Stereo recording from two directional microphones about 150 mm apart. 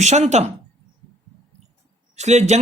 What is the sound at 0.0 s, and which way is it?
Speech, 50° right (ahead or behind).